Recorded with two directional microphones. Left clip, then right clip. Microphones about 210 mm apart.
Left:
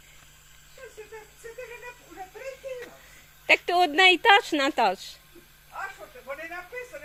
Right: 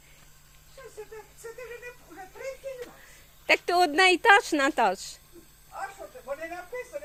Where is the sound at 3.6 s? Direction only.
10° right (ahead or behind).